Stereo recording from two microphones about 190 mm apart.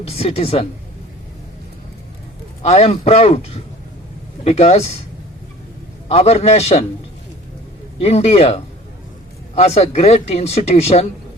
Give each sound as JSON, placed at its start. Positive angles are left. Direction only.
{"t": 0.0, "sound": "speech", "side_deg": 30}
{"t": 2.6, "sound": "speech", "side_deg": 35}
{"t": 6.1, "sound": "speech", "side_deg": 35}
{"t": 7.9, "sound": "speech", "side_deg": 35}